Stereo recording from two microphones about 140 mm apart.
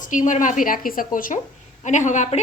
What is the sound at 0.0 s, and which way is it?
A woman's voice, 65° left (ahead or behind).